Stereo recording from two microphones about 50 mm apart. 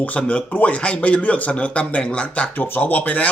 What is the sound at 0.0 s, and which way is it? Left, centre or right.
Speech, left.